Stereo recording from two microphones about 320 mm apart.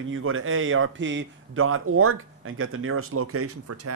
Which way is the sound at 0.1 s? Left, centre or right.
Right.